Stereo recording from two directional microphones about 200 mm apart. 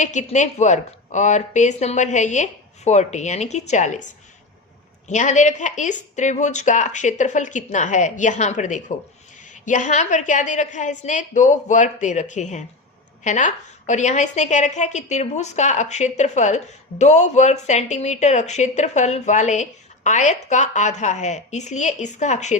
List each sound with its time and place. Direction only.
0.0 s a woman's voice: 35° left (ahead or behind)